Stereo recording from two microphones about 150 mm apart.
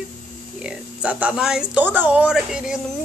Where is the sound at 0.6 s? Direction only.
10° right (ahead or behind).